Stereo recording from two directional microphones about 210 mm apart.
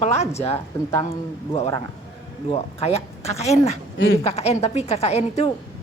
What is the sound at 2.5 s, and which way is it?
A woman's voice, 30° left (ahead or behind).